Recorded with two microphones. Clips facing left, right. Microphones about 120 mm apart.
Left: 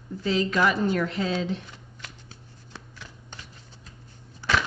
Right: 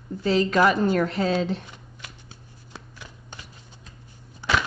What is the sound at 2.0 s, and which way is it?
Shuffling cards, 15° right (ahead or behind).